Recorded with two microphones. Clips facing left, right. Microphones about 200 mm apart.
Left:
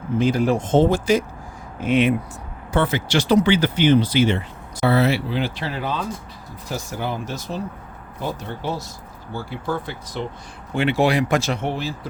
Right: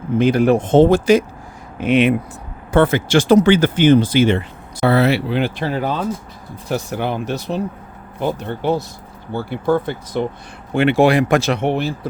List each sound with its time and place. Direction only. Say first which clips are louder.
0.2 s speech: right 5 dB; 65° right (ahead or behind)
2.7 s speech: right 6 dB; 50° right (ahead or behind)
6.7 s speech: right 6 dB; 65° right (ahead or behind)